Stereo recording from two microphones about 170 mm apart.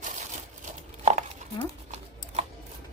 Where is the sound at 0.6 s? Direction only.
45° right (ahead or behind).